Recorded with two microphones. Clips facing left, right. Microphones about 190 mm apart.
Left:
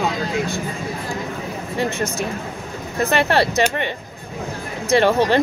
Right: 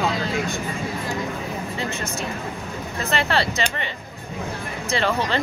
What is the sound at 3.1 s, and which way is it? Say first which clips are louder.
Speech: left 5 dB; 60° left (ahead or behind).